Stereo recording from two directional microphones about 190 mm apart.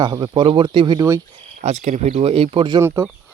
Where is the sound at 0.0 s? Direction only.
20° right (ahead or behind).